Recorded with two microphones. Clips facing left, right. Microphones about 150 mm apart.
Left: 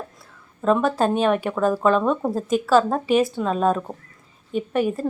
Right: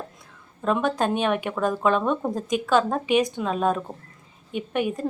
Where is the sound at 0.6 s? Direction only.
Centre (ahead or behind).